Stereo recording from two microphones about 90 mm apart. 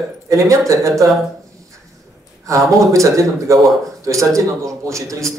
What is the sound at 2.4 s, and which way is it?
A man's voice, 35° right (ahead or behind).